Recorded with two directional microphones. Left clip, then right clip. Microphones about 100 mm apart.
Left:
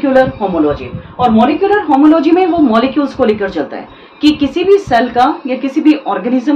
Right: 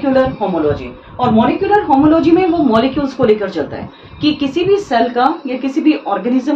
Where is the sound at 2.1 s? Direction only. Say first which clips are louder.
Left 2 dB; 50° left (ahead or behind).